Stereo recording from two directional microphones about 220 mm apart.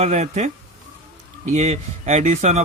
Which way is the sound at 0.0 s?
30° right (ahead or behind).